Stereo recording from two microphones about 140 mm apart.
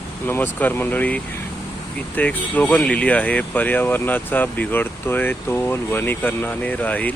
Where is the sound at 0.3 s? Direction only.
15° left (ahead or behind).